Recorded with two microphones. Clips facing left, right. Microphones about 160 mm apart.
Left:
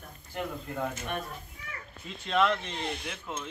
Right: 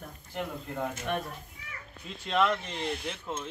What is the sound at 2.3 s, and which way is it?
Speech, centre (ahead or behind).